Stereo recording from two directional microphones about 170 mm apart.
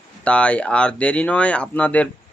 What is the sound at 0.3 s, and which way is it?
Speech, 5° left (ahead or behind).